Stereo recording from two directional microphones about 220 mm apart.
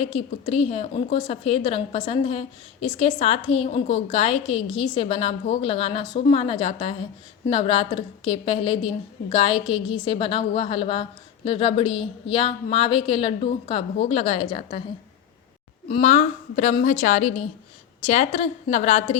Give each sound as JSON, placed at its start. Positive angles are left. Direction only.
{"t": 0.0, "sound": "a woman's voice", "side_deg": 25}
{"t": 15.9, "sound": "a woman's voice", "side_deg": 30}